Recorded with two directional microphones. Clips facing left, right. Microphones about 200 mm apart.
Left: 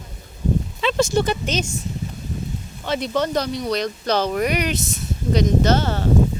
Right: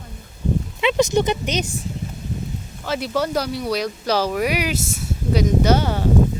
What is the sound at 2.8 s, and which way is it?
Speech, 5° right (ahead or behind).